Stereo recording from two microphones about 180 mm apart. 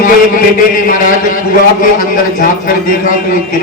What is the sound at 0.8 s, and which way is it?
A man's voice, 50° left (ahead or behind).